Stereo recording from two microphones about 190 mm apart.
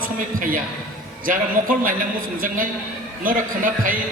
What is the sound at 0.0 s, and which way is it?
A man's voice, 45° right (ahead or behind).